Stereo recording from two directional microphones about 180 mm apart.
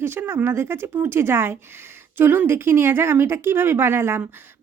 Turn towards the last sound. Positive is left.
turn(degrees=-15)  # may be behind; listen again after turning